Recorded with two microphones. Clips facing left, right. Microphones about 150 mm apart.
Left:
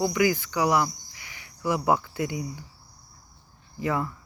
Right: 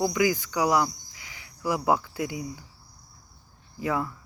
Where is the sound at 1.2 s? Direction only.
15° right (ahead or behind).